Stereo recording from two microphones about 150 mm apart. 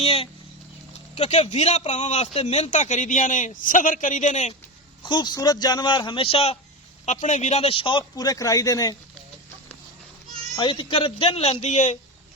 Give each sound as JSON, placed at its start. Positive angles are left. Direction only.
{"t": 0.0, "sound": "a sound", "side_deg": 40}
{"t": 1.1, "sound": "speech", "side_deg": 45}
{"t": 5.0, "sound": "a man's voice", "side_deg": 30}
{"t": 7.0, "sound": "a man's voice", "side_deg": 55}
{"t": 10.5, "sound": "a man's voice", "side_deg": 30}